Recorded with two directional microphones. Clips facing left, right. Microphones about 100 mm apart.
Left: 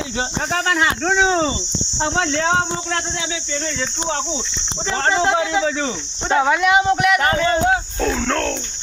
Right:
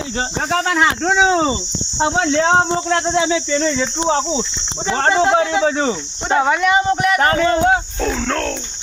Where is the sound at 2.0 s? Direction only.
10° right (ahead or behind).